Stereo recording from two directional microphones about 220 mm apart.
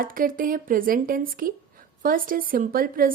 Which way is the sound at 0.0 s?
40° right (ahead or behind).